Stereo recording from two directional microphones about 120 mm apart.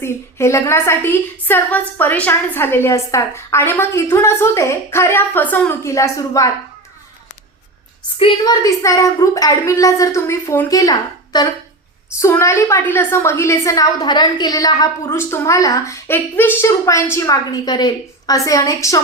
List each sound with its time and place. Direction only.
0.0 s a woman's voice: 25° left (ahead or behind)
8.4 s a woman's voice: 30° left (ahead or behind)